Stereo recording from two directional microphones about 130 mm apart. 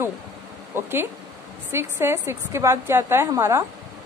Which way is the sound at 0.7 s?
15° right (ahead or behind).